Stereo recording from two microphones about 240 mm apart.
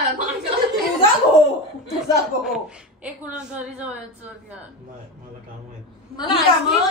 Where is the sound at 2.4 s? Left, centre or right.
Centre.